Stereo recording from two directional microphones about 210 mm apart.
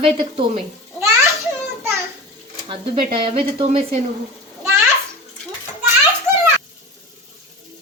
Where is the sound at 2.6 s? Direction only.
25° right (ahead or behind).